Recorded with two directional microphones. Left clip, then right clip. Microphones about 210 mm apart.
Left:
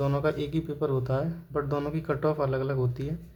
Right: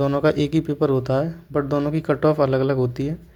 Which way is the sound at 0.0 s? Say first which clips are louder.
Right 9 dB; 30° right (ahead or behind).